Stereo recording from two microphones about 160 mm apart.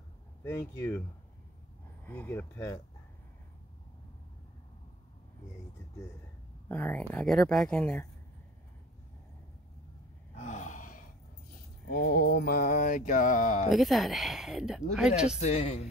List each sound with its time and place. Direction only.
0.4 s speech: 15° left (ahead or behind)
2.0 s speech: 10° left (ahead or behind)
6.7 s speech: 10° left (ahead or behind)
10.3 s gasp: 50° left (ahead or behind)
11.9 s speech: 65° left (ahead or behind)
12.6 s a sound: 60° left (ahead or behind)
13.7 s speech: centre (ahead or behind)
15.4 s speech: 40° left (ahead or behind)